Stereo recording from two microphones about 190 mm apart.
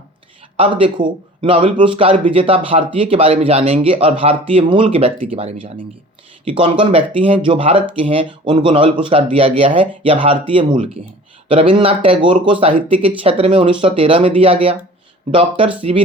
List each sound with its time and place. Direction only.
0.5 s speech: 30° right (ahead or behind)